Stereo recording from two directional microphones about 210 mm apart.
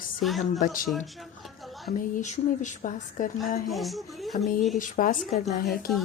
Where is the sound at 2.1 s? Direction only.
35° left (ahead or behind).